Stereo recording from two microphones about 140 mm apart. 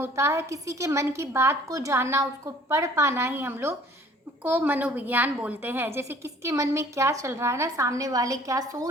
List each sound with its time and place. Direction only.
0.0 s a woman's voice: 20° right (ahead or behind)